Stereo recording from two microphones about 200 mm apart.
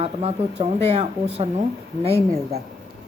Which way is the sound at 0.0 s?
30° right (ahead or behind).